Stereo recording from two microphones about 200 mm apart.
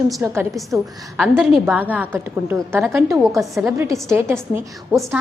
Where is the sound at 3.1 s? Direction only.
Centre (ahead or behind).